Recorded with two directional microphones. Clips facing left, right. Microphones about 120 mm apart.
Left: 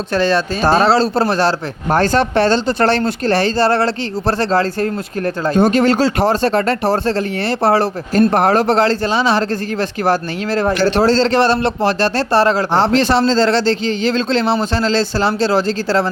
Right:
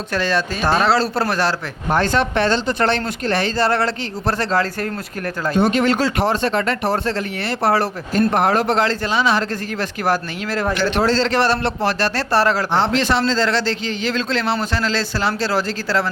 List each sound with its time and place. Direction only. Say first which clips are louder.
0.1 s speech: left 5 dB; 30° left (ahead or behind)
8.3 s a man's voice: left 4 dB; 40° left (ahead or behind)
12.7 s a man's voice: left 4 dB; 35° left (ahead or behind)